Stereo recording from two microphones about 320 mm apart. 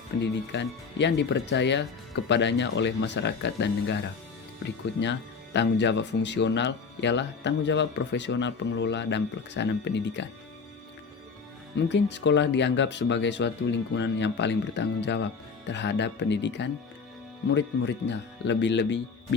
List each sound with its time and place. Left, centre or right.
0.2 s speech: left
5.5 s speech: left
11.8 s speech: left